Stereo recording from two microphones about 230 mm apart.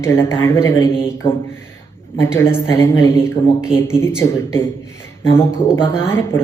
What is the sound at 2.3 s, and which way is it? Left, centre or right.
A man's voice, centre.